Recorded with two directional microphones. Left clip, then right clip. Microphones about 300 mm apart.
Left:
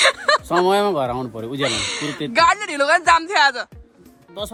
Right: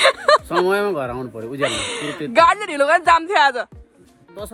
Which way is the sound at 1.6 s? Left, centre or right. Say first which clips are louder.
Even; centre.